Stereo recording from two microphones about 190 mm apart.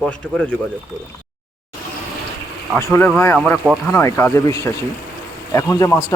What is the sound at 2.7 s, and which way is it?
Speech, 10° left (ahead or behind).